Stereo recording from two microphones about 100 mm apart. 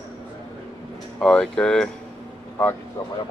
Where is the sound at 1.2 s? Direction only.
5° left (ahead or behind).